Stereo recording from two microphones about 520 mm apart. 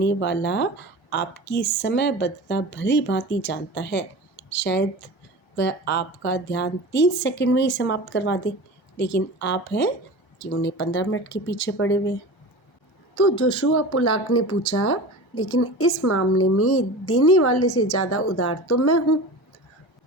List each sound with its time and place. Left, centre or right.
0.0 s a woman's voice: centre
9.0 s a woman's voice: left
9.4 s a woman's voice: centre
13.1 s a woman's voice: left